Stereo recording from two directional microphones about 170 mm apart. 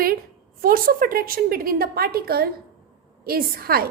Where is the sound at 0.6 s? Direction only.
60° right (ahead or behind).